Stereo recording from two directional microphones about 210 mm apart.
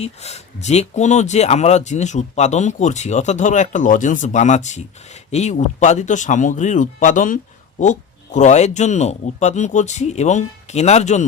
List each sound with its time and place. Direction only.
0.0 s speech: 30° left (ahead or behind)